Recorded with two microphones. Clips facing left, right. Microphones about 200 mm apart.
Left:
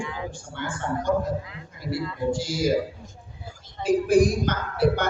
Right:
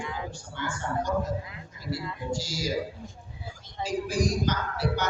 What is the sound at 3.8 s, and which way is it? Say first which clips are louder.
Speech: left 9 dB; 55° left (ahead or behind).